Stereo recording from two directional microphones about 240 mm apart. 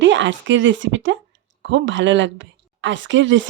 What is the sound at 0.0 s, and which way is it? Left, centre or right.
Speech, right.